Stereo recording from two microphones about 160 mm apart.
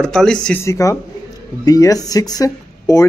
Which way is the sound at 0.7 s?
20° left (ahead or behind).